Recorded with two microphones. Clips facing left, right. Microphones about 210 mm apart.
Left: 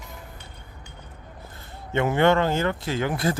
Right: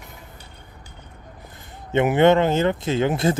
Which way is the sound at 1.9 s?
20° right (ahead or behind).